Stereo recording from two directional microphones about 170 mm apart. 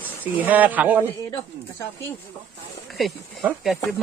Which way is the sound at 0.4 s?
10° right (ahead or behind).